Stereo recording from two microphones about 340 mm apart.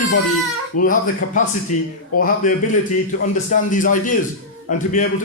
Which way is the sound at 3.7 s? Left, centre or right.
Left.